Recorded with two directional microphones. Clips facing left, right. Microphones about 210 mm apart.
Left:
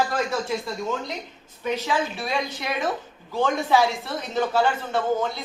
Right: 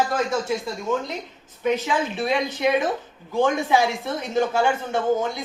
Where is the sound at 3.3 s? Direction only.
15° right (ahead or behind).